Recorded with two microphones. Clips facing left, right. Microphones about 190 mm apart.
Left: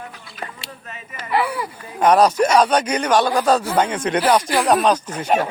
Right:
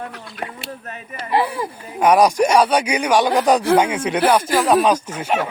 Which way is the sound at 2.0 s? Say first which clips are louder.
Even; 10° right (ahead or behind).